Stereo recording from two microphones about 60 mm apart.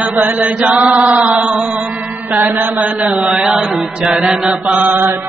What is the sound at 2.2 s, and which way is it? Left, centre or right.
Chant, right.